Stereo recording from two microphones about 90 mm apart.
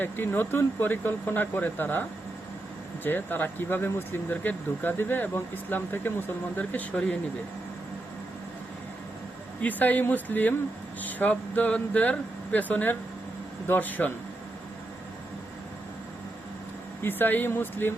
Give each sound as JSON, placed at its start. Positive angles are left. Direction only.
{"t": 0.0, "sound": "speech", "side_deg": 25}
{"t": 9.6, "sound": "speech", "side_deg": 20}
{"t": 17.0, "sound": "speech", "side_deg": 25}